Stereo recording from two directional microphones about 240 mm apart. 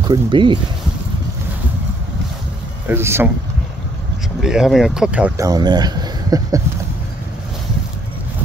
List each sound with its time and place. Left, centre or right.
0.0 s speech: centre
2.9 s speech: centre
4.4 s speech: centre
5.5 s speech: centre